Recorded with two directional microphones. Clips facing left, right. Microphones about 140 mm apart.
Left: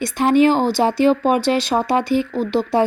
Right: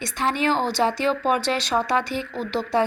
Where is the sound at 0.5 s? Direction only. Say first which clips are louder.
Left 6 dB; 5° left (ahead or behind).